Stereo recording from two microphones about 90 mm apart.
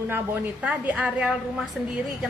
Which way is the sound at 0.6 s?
15° right (ahead or behind).